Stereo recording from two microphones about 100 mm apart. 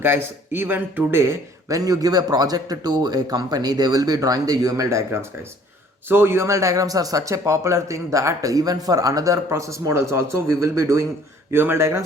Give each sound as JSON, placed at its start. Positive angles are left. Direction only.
{"t": 0.0, "sound": "speech", "side_deg": -20}